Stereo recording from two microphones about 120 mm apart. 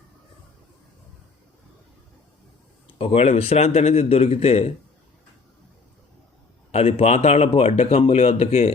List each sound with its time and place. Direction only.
2.8 s speech: 55° left (ahead or behind)
6.7 s speech: 55° left (ahead or behind)